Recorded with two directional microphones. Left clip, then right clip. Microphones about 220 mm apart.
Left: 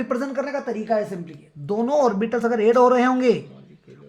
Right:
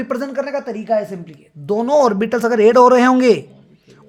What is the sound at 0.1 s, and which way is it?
A woman's voice, 45° right (ahead or behind).